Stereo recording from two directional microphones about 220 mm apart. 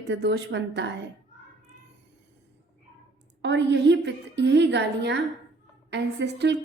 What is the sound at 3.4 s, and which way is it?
A woman's voice, 50° right (ahead or behind).